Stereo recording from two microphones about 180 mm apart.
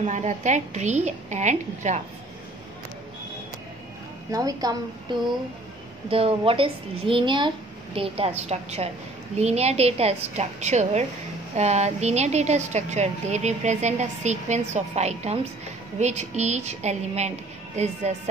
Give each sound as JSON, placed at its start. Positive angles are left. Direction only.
{"t": 0.0, "sound": "speech", "side_deg": -40}
{"t": 4.3, "sound": "a woman's voice", "side_deg": -20}
{"t": 6.0, "sound": "speech", "side_deg": -30}